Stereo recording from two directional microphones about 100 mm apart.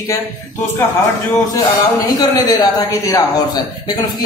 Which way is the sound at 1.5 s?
40° left (ahead or behind).